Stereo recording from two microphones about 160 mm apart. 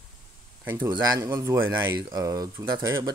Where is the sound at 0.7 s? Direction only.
25° right (ahead or behind).